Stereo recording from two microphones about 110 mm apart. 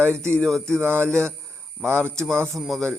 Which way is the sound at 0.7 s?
20° right (ahead or behind).